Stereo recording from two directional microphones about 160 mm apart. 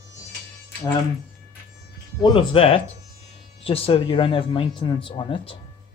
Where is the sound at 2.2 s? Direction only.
35° left (ahead or behind).